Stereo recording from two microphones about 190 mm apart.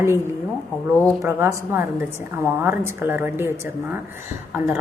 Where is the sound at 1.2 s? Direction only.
15° right (ahead or behind).